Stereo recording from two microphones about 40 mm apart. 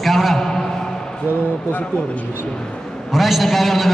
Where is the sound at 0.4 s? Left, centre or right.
Centre.